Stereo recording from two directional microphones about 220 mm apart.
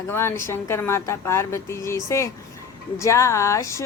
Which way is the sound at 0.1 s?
10° left (ahead or behind).